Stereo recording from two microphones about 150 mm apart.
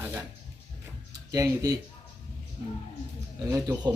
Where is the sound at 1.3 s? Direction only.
20° right (ahead or behind).